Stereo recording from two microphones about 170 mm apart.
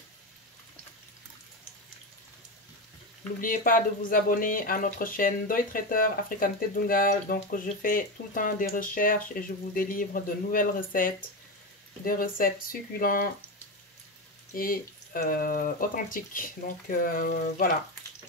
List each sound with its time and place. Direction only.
3.3 s speech: 55° left (ahead or behind)
14.5 s speech: 55° left (ahead or behind)